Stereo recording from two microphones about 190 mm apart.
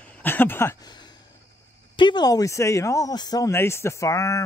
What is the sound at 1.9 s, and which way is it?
Speech, 25° left (ahead or behind).